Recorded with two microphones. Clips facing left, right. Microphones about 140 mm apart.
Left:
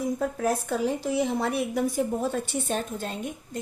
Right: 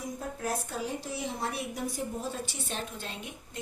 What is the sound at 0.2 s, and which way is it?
A woman's voice, 70° left (ahead or behind).